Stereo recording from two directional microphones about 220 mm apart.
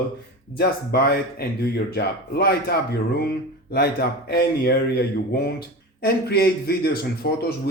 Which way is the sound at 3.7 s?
45° left (ahead or behind).